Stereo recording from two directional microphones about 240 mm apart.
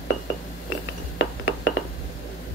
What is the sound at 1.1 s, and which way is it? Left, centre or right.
Glass, left.